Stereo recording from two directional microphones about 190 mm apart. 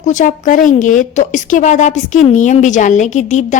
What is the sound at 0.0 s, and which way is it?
A woman's voice, 40° left (ahead or behind).